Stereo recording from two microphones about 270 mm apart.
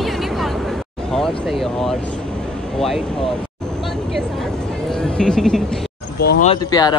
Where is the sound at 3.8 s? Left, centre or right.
Centre.